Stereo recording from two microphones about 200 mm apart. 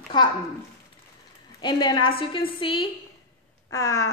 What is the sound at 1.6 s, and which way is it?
A woman's voice, 20° left (ahead or behind).